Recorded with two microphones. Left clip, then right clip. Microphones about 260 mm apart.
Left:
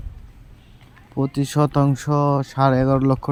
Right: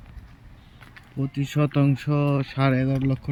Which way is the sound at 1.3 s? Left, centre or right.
Left.